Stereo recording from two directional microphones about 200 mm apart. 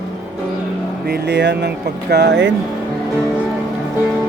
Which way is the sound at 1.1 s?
60° right (ahead or behind).